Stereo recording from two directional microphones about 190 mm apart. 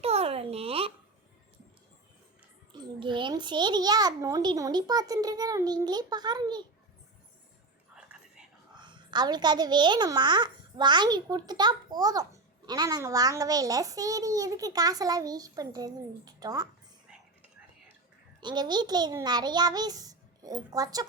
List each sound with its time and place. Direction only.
0.0 s a sound: 35° right (ahead or behind)
2.7 s a child's voice: 25° right (ahead or behind)
8.8 s a child's voice: 25° right (ahead or behind)
18.3 s a child's voice: 25° right (ahead or behind)